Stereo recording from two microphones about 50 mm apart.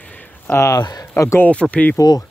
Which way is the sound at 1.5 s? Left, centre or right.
Left.